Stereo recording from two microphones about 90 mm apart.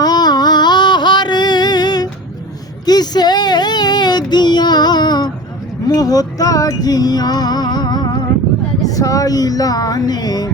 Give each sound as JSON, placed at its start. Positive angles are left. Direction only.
{"t": 0.0, "sound": "a sound", "side_deg": 50}
{"t": 2.8, "sound": "child singing", "side_deg": 50}
{"t": 5.9, "sound": "music", "side_deg": 45}
{"t": 8.8, "sound": "speech", "side_deg": 40}